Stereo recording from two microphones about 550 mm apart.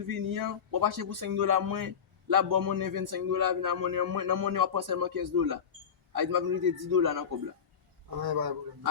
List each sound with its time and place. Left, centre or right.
0.1 s a man's voice: right